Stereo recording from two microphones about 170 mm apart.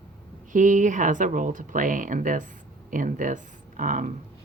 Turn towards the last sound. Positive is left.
turn(degrees=-50)  # may be behind; listen again after turning